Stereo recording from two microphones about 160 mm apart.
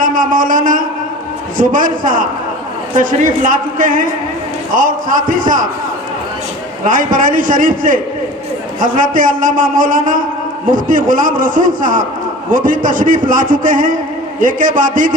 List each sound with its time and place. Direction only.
0.0 s a man's voice: 60° right (ahead or behind)
6.8 s a man's voice: 55° right (ahead or behind)